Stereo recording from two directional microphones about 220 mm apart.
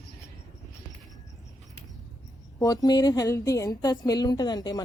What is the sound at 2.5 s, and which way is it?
A woman's voice, 15° left (ahead or behind).